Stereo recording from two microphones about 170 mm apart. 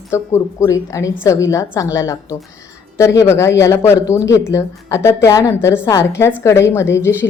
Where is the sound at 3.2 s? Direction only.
15° left (ahead or behind).